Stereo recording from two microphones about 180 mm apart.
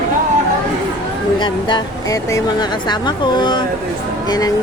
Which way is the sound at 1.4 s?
25° left (ahead or behind).